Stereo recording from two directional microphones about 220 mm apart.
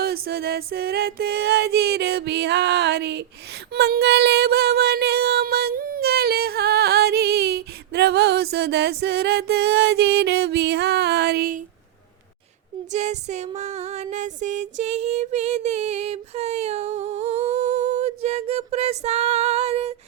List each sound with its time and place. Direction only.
0.0 s music: 45° right (ahead or behind)
3.7 s child singing: 45° right (ahead or behind)
12.9 s music: 30° right (ahead or behind)